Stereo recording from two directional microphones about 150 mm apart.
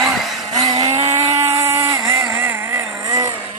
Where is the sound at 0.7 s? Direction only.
30° right (ahead or behind).